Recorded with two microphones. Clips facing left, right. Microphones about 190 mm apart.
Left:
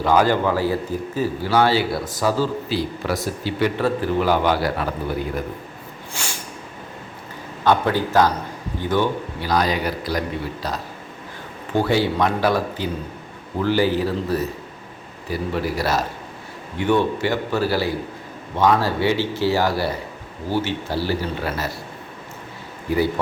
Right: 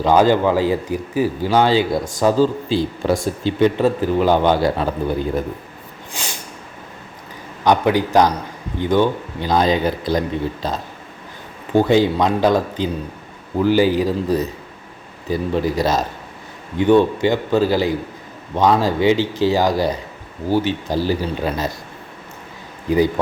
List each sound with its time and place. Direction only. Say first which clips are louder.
0.0 s a man's voice: right 4 dB; 20° right (ahead or behind)
6.2 s snort: right 2 dB; 15° right (ahead or behind)
7.6 s a man's voice: right 3 dB; 15° right (ahead or behind)